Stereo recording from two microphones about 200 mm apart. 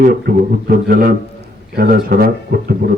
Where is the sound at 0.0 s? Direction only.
50° right (ahead or behind).